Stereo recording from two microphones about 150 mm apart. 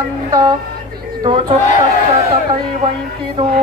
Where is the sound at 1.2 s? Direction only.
35° right (ahead or behind).